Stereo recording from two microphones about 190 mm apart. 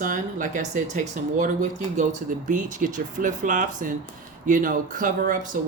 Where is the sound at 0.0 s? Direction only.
45° right (ahead or behind).